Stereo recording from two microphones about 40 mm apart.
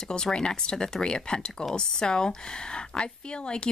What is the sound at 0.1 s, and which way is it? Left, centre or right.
Speech, left.